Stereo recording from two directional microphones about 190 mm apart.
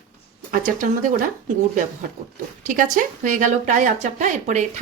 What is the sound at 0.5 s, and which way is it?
Speech, 45° right (ahead or behind).